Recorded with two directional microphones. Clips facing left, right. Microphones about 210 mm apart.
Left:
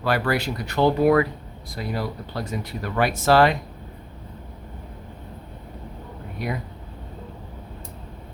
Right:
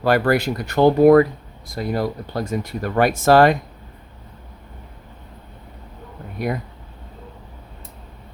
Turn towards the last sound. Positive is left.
turn(degrees=-50)  # may be behind; listen again after turning